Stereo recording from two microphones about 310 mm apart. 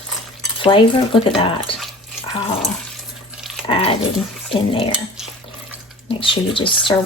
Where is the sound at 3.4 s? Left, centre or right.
Centre.